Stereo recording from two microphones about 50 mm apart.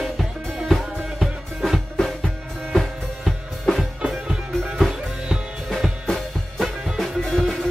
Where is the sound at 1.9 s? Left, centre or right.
Centre.